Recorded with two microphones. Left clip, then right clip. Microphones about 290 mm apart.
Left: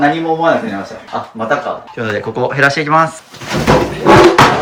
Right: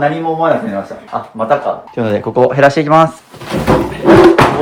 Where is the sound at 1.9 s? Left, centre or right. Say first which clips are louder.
Right 6 dB; centre.